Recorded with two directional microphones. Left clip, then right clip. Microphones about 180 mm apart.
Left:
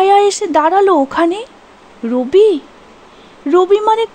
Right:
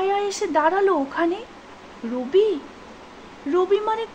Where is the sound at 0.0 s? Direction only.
55° left (ahead or behind).